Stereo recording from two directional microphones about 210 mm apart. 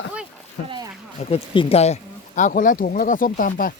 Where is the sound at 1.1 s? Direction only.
25° left (ahead or behind).